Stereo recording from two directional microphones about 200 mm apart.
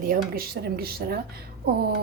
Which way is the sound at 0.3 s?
50° right (ahead or behind).